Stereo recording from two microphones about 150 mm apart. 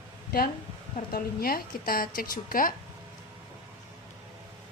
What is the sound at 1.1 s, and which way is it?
A woman's voice, 80° left.